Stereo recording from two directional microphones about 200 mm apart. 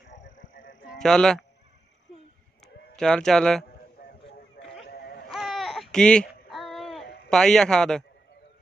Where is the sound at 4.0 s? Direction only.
50° left (ahead or behind).